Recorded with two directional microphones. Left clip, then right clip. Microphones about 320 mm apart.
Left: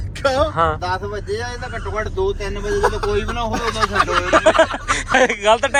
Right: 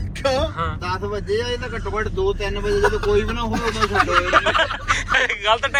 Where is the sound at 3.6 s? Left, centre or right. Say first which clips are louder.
Left 1 dB; left.